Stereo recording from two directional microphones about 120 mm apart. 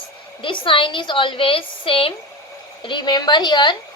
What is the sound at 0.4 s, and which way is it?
A woman's voice, 45° left (ahead or behind).